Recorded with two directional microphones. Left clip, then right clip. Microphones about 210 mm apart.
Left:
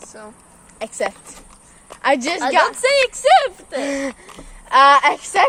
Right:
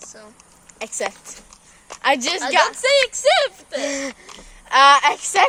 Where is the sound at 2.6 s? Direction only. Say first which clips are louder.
Left 1 dB; 35° left (ahead or behind).